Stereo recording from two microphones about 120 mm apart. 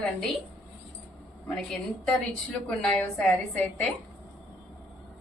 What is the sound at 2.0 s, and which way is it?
A woman's voice, 10° left (ahead or behind).